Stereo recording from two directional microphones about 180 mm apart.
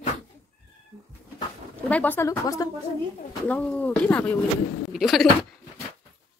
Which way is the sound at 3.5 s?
5° left (ahead or behind).